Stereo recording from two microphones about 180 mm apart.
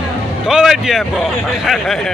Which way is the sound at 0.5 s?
Centre (ahead or behind).